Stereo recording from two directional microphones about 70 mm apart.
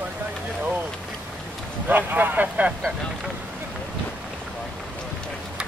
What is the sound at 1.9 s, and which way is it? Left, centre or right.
Speech, right.